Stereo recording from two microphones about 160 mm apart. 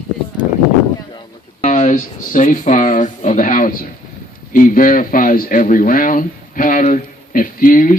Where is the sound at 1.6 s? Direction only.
45° left (ahead or behind).